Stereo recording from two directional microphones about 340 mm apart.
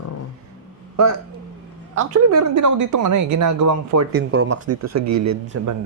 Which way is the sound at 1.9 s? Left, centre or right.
Right.